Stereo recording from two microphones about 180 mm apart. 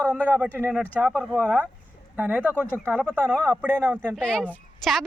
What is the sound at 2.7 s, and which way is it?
Speech, 5° left (ahead or behind).